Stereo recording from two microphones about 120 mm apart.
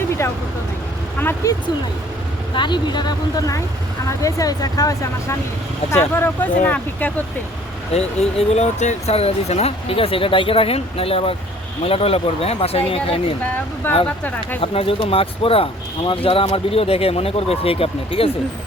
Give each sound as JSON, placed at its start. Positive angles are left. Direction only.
{"t": 1.5, "sound": "speech", "side_deg": 30}
{"t": 2.6, "sound": "speech", "side_deg": 40}
{"t": 5.9, "sound": "speech", "side_deg": 20}
{"t": 7.9, "sound": "speech", "side_deg": 60}
{"t": 13.8, "sound": "speech", "side_deg": 15}
{"t": 14.6, "sound": "speech", "side_deg": 50}